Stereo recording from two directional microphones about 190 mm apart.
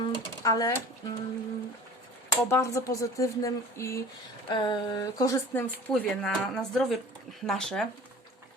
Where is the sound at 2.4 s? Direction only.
15° left (ahead or behind).